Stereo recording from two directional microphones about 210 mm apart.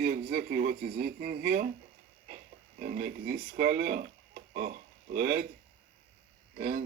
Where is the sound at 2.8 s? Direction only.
40° right (ahead or behind).